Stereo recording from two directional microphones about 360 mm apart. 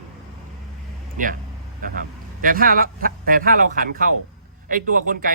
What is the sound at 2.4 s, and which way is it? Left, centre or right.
A man's voice, right.